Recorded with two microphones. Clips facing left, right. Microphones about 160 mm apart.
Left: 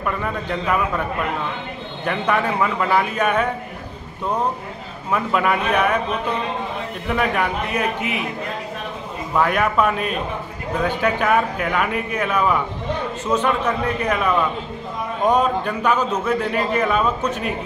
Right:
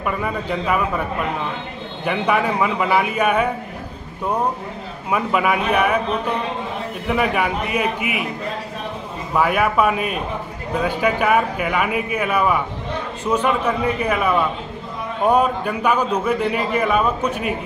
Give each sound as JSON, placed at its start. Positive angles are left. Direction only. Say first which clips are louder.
{"t": 0.0, "sound": "speech", "louder": "right 1 dB", "side_deg": -5}
{"t": 2.0, "sound": "speech", "louder": "right 1 dB", "side_deg": -10}
{"t": 5.1, "sound": "speech", "louder": "right 1 dB", "side_deg": -5}
{"t": 7.1, "sound": "speech", "louder": "right 1 dB", "side_deg": -5}
{"t": 9.3, "sound": "speech", "louder": "right 1 dB", "side_deg": -5}